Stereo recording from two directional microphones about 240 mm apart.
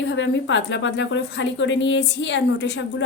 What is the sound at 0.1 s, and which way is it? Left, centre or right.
A woman's voice, left.